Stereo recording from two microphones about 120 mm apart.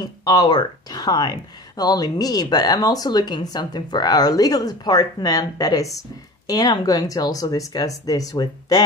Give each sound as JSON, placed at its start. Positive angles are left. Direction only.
{"t": 0.0, "sound": "speech", "side_deg": 35}